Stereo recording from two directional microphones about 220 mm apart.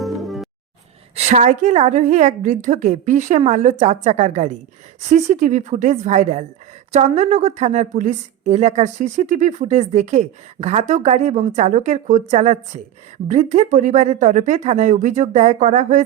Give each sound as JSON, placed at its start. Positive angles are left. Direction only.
{"t": 0.0, "sound": "music", "side_deg": 0}
{"t": 1.1, "sound": "a woman's voice", "side_deg": -35}